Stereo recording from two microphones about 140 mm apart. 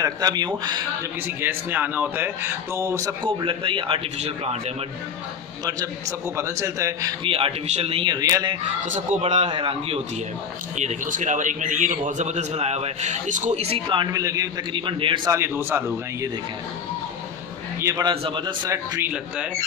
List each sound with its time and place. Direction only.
0.0 s a man's voice: 30° right (ahead or behind)
1.2 s speech: 15° right (ahead or behind)
3.3 s a man's voice: 35° right (ahead or behind)
5.7 s a man's voice: 25° right (ahead or behind)
7.2 s a man's voice: 40° right (ahead or behind); by 8.5 s 25° right (ahead or behind)
8.6 s a man's voice: 60° right (ahead or behind)
9.5 s a man's voice: 40° right (ahead or behind)
10.8 s a man's voice: 60° right (ahead or behind); by 14.2 s 35° right (ahead or behind)
14.2 s a man's voice: 25° right (ahead or behind)
15.2 s a man's voice: 20° right (ahead or behind)
17.7 s a man's voice: 20° right (ahead or behind)
18.0 s a man's voice: 40° right (ahead or behind)